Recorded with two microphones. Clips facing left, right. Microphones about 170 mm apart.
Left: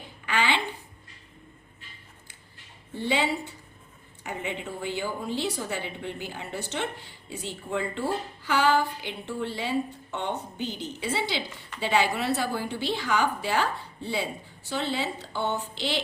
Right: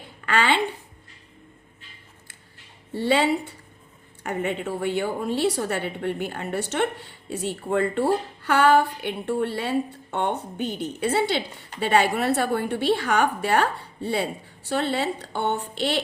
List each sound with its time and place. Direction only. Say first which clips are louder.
0.3 s a woman's voice: right 4 dB; 65° right (ahead or behind)
2.9 s speech: right 5 dB; 70° right (ahead or behind)
4.2 s a woman's voice: right 7 dB; 60° right (ahead or behind)